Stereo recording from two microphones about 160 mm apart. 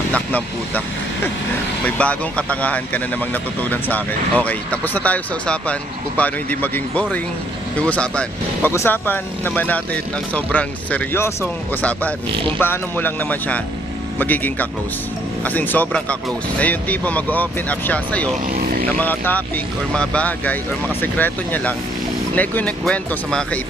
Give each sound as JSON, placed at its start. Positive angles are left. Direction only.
{"t": 0.1, "sound": "speech", "side_deg": 10}
{"t": 12.5, "sound": "speech", "side_deg": 10}
{"t": 18.5, "sound": "vehicle", "side_deg": -70}
{"t": 18.9, "sound": "speech", "side_deg": 10}